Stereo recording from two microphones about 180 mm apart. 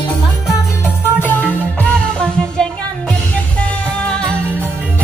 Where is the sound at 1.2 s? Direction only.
10° left (ahead or behind).